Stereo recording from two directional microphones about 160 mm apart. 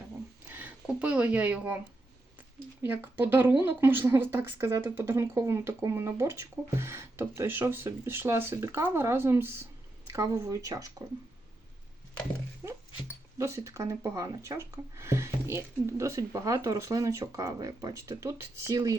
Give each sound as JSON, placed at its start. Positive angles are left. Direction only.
{"t": 0.5, "sound": "speech", "side_deg": -10}
{"t": 2.8, "sound": "speech", "side_deg": -10}
{"t": 13.4, "sound": "speech", "side_deg": -20}